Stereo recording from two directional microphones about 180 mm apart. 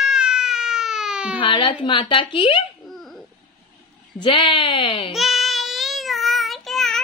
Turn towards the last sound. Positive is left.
turn(degrees=0)  # may be behind; listen again after turning